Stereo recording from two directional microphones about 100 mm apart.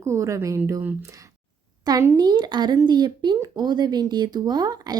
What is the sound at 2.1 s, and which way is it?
Speech, 45° right (ahead or behind).